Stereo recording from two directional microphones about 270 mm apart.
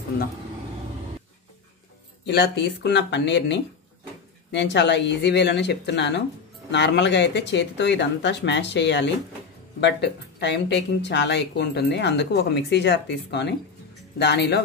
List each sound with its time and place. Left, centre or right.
2.2 s speech: left